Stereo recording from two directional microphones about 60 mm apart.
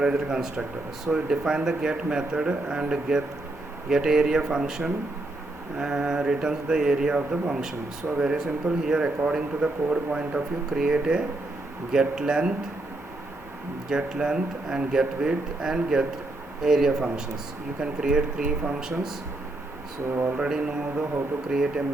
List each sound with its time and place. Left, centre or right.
0.0 s a man's voice: centre
13.9 s a man's voice: centre
20.3 s a man's voice: centre